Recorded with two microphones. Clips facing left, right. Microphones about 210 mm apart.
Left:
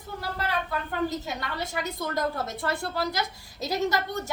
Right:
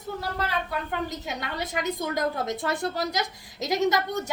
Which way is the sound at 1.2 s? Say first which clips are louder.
Right 1 dB; 20° right (ahead or behind).